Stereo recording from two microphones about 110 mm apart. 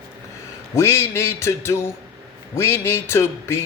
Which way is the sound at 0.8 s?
25° left (ahead or behind).